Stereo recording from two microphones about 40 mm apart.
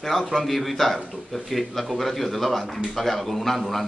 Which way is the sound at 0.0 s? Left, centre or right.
Centre.